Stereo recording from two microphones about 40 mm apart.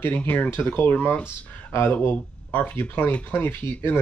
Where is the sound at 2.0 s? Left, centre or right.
Left.